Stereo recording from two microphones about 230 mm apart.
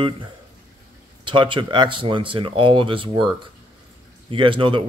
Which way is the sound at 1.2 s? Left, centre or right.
Right.